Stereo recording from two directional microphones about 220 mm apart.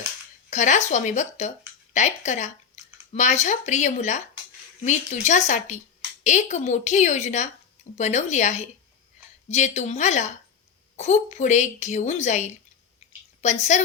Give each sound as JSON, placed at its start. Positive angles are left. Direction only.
{"t": 0.5, "sound": "speech", "side_deg": 35}